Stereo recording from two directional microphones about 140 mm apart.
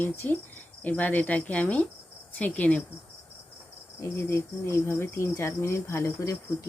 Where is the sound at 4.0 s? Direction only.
20° left (ahead or behind).